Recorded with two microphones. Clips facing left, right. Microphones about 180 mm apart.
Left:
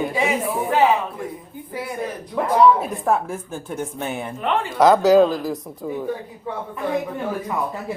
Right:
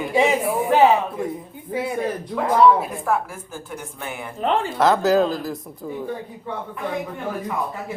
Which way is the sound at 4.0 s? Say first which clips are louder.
Left 3 dB; 25° left (ahead or behind).